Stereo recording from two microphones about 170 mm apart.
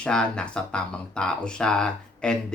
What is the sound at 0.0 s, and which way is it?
Speech, 5° left (ahead or behind).